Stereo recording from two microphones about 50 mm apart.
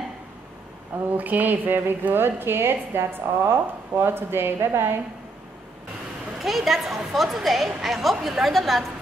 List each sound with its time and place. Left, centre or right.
1.1 s a woman's voice: right
6.4 s a woman's voice: centre